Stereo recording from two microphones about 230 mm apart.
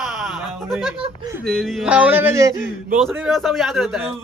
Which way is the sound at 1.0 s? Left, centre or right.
Centre.